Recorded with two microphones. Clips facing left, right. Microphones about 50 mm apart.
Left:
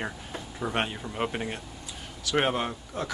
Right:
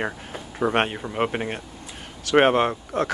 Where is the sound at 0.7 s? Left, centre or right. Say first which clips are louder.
Right 6 dB; right.